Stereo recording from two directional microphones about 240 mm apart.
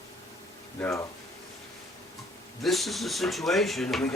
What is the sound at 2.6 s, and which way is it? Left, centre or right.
Speech, centre.